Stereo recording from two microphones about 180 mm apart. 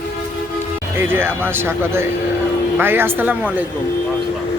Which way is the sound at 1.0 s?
10° right (ahead or behind).